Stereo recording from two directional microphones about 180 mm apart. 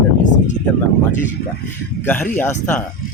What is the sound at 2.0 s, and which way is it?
Speech, 15° left (ahead or behind).